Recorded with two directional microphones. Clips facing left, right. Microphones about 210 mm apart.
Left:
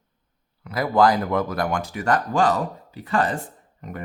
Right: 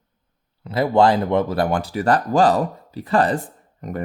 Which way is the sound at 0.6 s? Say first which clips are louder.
Right 3 dB; 25° right (ahead or behind).